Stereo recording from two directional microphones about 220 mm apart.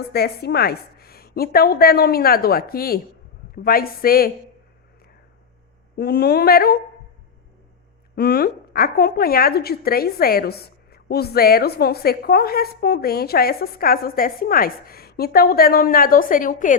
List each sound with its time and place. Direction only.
0.1 s a woman's voice: 45° left (ahead or behind)
6.0 s a woman's voice: 45° left (ahead or behind)
8.1 s a woman's voice: 45° left (ahead or behind)